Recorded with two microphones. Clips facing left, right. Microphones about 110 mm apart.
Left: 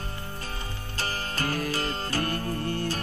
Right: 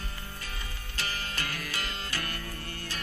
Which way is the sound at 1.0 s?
40° left (ahead or behind).